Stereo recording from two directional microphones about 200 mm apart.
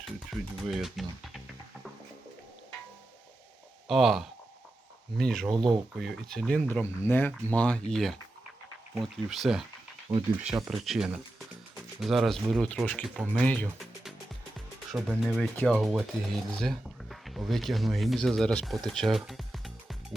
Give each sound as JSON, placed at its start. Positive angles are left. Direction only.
{"t": 0.0, "sound": "speech", "side_deg": 0}
{"t": 3.8, "sound": "speech", "side_deg": 0}
{"t": 10.1, "sound": "speech", "side_deg": -15}
{"t": 10.7, "sound": "speech", "side_deg": 0}